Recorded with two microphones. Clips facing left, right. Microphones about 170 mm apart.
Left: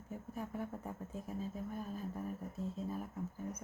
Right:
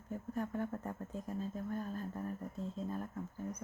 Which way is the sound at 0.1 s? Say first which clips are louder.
Right 4 dB; 5° left (ahead or behind).